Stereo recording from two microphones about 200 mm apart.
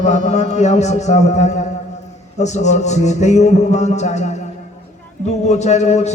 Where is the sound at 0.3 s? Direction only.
35° left (ahead or behind).